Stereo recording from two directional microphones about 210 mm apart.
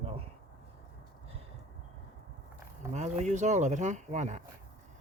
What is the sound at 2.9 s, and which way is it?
Speech, 35° right (ahead or behind).